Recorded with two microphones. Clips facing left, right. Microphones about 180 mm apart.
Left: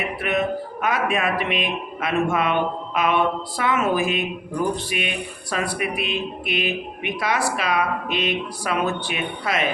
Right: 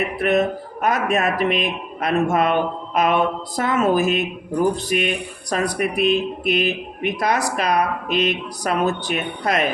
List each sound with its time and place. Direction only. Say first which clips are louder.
0.2 s speech: right 4 dB; 45° right (ahead or behind)